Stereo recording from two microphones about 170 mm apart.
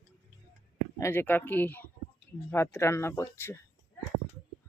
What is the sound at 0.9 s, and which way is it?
A woman's voice, 15° left (ahead or behind).